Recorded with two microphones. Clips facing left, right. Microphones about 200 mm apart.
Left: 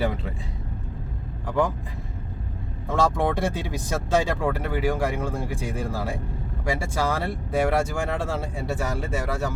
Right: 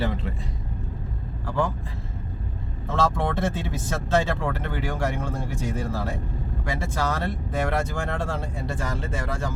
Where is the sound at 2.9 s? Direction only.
15° left (ahead or behind).